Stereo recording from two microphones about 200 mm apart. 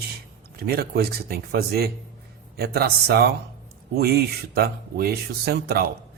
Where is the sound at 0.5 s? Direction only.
50° right (ahead or behind).